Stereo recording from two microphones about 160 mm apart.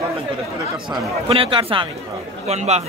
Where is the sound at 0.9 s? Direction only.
35° right (ahead or behind).